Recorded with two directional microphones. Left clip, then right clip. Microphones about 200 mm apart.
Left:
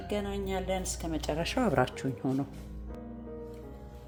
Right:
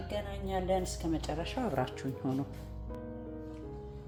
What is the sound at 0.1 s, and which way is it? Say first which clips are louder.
Speech: left 3 dB; 65° left (ahead or behind).